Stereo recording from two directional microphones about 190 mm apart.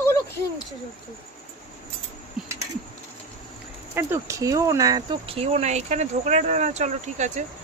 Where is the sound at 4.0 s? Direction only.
15° right (ahead or behind).